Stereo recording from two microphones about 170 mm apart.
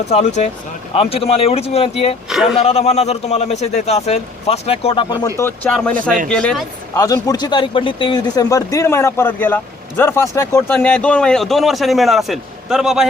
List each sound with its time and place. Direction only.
0.1 s a man's voice: 40° left (ahead or behind)
2.3 s speech: centre (ahead or behind)
2.6 s a man's voice: 40° left (ahead or behind)
5.0 s speech: 20° left (ahead or behind)
6.2 s speech: 5° left (ahead or behind)
6.9 s speech: 20° left (ahead or behind); by 13.1 s 5° right (ahead or behind)